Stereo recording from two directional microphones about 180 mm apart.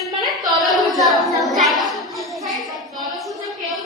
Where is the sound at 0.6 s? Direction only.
Centre (ahead or behind).